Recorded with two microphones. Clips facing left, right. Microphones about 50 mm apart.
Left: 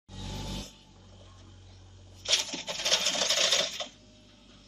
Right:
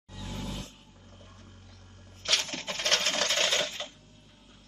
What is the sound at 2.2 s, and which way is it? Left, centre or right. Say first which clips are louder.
Sewing machine: right 2 dB; right.